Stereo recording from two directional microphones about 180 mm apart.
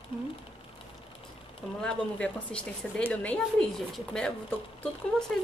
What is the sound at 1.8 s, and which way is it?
A woman's voice, 5° left (ahead or behind).